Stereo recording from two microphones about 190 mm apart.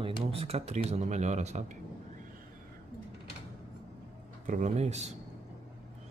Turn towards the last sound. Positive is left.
turn(degrees=-35)  # may be behind; listen again after turning